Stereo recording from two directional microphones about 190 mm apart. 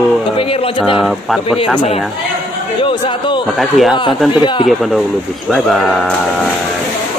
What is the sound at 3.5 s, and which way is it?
A man's voice, centre (ahead or behind).